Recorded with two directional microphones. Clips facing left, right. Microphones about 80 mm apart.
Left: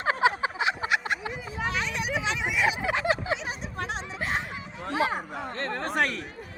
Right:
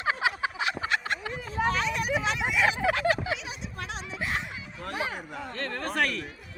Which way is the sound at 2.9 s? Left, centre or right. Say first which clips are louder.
Even; left.